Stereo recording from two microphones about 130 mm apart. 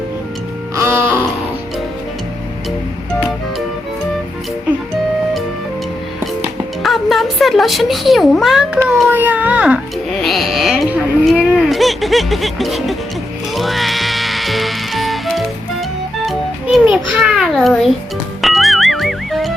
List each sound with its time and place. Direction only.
0.8 s music: 20° right (ahead or behind)
6.8 s speech: centre (ahead or behind)
9.0 s speech: 15° right (ahead or behind)
10.1 s music: 5° left (ahead or behind)
11.3 s speech: centre (ahead or behind)
13.5 s music: centre (ahead or behind)
17.5 s speech: centre (ahead or behind)
18.4 s music: centre (ahead or behind)